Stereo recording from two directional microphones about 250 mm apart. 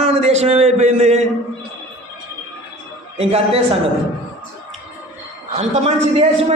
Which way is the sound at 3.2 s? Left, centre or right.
Right.